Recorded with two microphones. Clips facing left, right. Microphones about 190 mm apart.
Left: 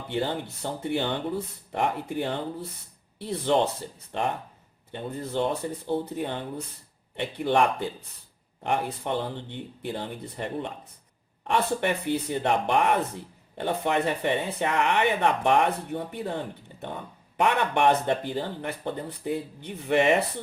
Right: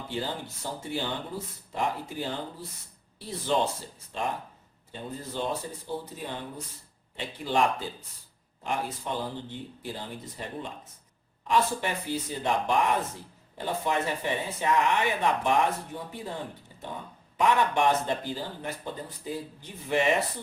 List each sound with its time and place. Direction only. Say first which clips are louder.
0.1 s speech: left 6 dB; 60° left (ahead or behind)